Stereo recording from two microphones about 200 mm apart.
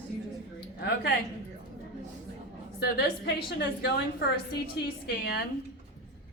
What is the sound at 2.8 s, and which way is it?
A woman's voice, 55° left (ahead or behind).